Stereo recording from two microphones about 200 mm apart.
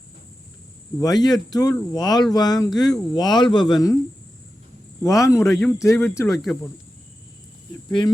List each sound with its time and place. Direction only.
0.9 s speech: 20° left (ahead or behind)
5.0 s a man's voice: 15° left (ahead or behind)
5.5 s speech: centre (ahead or behind)
5.8 s a man's voice: 15° left (ahead or behind)
6.2 s speech: centre (ahead or behind)
7.9 s speech: 20° left (ahead or behind)